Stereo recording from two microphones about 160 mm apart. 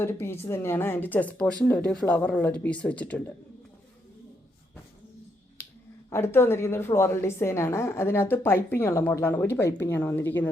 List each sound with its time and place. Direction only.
0.0 s a woman's voice: 15° left (ahead or behind)
6.1 s a woman's voice: 15° left (ahead or behind)